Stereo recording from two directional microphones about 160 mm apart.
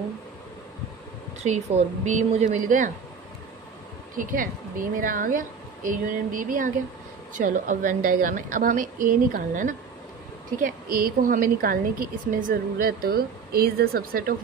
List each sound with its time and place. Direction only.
1.4 s a woman's voice: 45° right (ahead or behind)
4.2 s a woman's voice: 60° right (ahead or behind)
10.6 s a woman's voice: 65° right (ahead or behind)